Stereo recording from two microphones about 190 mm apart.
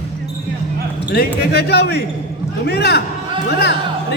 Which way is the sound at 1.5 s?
60° left (ahead or behind).